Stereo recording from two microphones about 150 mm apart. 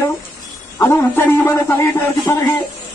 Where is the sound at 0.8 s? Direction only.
15° left (ahead or behind).